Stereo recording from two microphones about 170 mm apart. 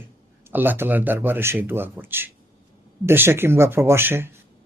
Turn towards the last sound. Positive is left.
turn(degrees=-15)  # may be behind; listen again after turning